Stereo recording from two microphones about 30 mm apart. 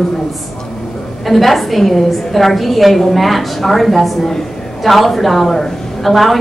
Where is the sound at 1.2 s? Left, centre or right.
Centre.